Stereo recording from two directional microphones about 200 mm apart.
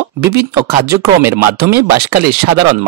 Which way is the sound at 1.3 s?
50° right (ahead or behind).